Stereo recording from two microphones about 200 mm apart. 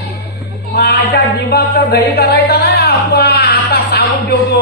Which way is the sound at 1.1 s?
50° left (ahead or behind).